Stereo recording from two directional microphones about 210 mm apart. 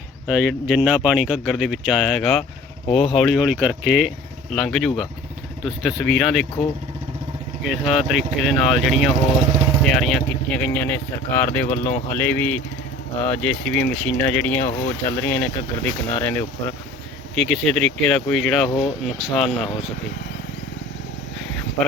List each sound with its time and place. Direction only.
0.3 s speech: 5° right (ahead or behind)
7.6 s speech: centre (ahead or behind)
18.7 s speech: 25° left (ahead or behind)
19.0 s speech: centre (ahead or behind)